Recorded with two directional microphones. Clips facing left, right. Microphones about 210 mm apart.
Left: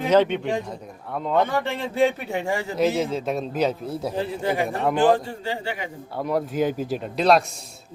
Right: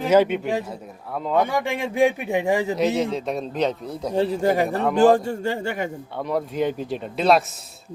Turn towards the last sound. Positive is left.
turn(degrees=0)  # may be behind; listen again after turning